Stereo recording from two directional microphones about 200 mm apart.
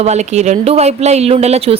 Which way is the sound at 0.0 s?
35° right (ahead or behind).